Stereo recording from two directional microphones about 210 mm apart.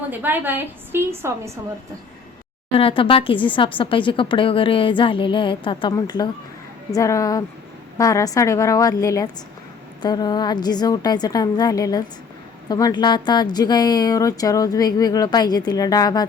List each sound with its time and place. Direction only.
0.1 s a woman's voice: 10° right (ahead or behind)
2.7 s a woman's voice: 25° left (ahead or behind)